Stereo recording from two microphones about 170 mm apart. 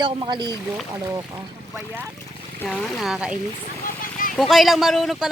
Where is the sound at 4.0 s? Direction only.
55° left (ahead or behind).